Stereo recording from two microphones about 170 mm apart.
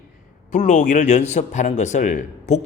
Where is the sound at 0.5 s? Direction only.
45° left (ahead or behind).